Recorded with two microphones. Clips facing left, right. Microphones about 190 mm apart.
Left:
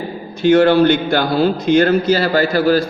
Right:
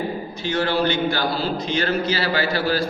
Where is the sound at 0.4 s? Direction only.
55° left (ahead or behind).